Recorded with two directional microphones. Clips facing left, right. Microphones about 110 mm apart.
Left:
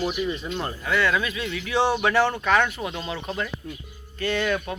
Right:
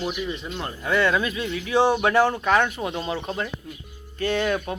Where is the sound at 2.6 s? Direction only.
40° right (ahead or behind).